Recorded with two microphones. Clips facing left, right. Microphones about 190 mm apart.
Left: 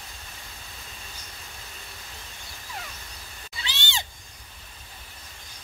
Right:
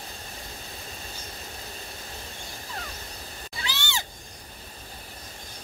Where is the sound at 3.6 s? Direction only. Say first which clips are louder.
Right 2 dB; 20° left (ahead or behind).